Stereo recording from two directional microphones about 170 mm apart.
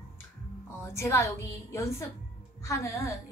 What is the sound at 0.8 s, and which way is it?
A woman's voice, 15° left (ahead or behind).